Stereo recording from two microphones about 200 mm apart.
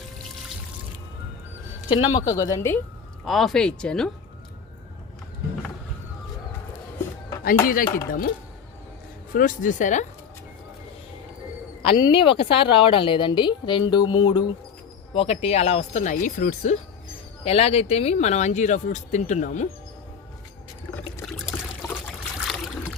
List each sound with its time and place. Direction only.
1.9 s speech: 25° left (ahead or behind)
3.2 s speech: centre (ahead or behind)
7.7 s speech: 45° left (ahead or behind)
9.3 s speech: 40° left (ahead or behind)
11.8 s speech: 25° left (ahead or behind)
21.2 s trickle: centre (ahead or behind)
21.8 s trickle: 10° left (ahead or behind)
22.4 s trickle: centre (ahead or behind)